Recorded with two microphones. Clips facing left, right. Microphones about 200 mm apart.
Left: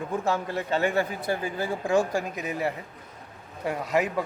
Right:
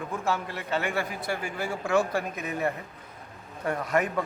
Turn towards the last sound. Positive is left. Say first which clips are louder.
# left 1 dB
turn(degrees=5)  # may be behind; listen again after turning